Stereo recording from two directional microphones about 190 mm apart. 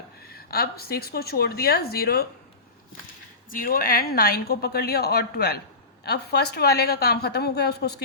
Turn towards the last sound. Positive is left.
turn(degrees=60)  # may be behind; listen again after turning